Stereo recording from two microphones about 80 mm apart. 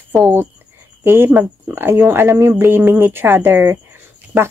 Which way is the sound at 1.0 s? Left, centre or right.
Right.